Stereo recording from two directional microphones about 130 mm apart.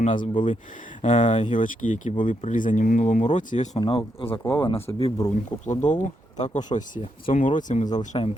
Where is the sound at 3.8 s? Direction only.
45° left (ahead or behind).